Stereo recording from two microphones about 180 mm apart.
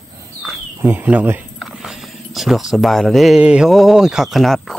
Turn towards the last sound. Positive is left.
turn(degrees=0)  # may be behind; listen again after turning